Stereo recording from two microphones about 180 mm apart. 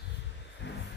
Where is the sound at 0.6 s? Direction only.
80° left.